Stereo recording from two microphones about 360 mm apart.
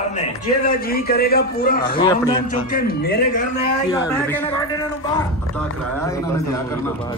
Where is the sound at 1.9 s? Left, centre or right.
Centre.